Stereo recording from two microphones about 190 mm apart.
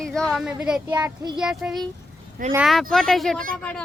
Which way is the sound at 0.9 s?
20° right (ahead or behind).